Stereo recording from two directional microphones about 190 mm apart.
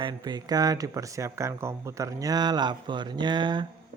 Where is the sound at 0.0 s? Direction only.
20° right (ahead or behind).